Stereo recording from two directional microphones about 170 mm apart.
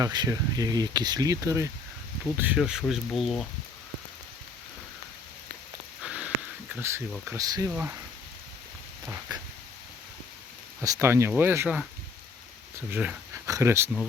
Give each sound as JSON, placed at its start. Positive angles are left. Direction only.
{"t": 0.0, "sound": "speech", "side_deg": -20}
{"t": 6.0, "sound": "a sound", "side_deg": -5}
{"t": 6.7, "sound": "speech", "side_deg": -15}
{"t": 7.7, "sound": "speech", "side_deg": -10}
{"t": 9.3, "sound": "speech", "side_deg": -25}
{"t": 10.8, "sound": "speech", "side_deg": -15}
{"t": 12.9, "sound": "speech", "side_deg": -10}